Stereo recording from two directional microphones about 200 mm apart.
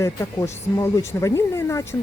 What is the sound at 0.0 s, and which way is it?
Speech, 15° left (ahead or behind).